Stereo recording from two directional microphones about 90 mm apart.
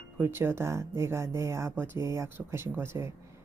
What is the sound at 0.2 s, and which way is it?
Speech, 25° right (ahead or behind).